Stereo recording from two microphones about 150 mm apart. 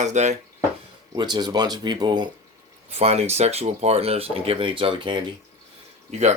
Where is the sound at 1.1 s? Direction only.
30° right (ahead or behind).